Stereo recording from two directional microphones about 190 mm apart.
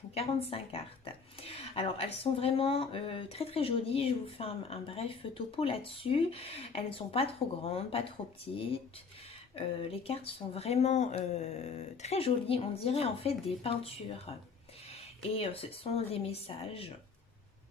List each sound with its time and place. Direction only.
0.1 s speech: 30° left (ahead or behind)
9.6 s speech: 30° left (ahead or behind)